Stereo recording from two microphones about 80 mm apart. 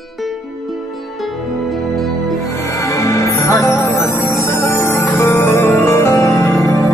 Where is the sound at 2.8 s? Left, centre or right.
Left.